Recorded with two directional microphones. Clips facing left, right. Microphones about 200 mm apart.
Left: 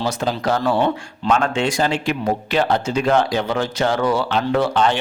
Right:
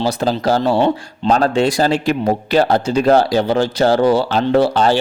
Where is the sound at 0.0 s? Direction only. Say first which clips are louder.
Right 4 dB; 35° right (ahead or behind).